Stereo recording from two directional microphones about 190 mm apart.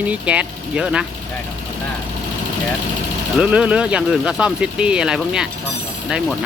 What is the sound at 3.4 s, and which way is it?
Speech, 5° right (ahead or behind).